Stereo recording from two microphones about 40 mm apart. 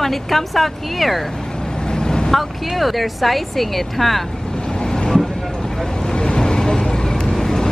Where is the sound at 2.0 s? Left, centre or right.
Centre.